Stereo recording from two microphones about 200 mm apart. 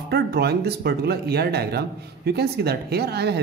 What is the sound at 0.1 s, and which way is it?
Speech, 55° right (ahead or behind).